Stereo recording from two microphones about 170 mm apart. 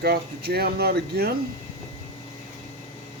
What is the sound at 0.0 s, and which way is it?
Speech, 70° right (ahead or behind).